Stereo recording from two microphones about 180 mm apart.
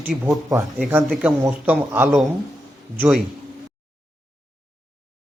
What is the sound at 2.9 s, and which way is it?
Speech, centre (ahead or behind).